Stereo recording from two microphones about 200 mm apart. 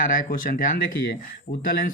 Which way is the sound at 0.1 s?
40° left (ahead or behind).